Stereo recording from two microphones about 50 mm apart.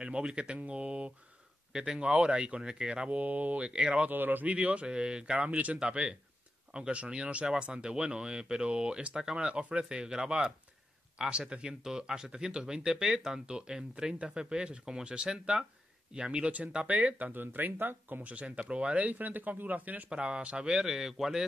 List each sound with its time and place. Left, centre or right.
0.0 s speech: centre
1.7 s speech: centre
3.2 s speech: right
3.5 s speech: centre
4.1 s speech: right
4.8 s speech: centre; by 18.2 s right
18.2 s speech: right
20.1 s speech: centre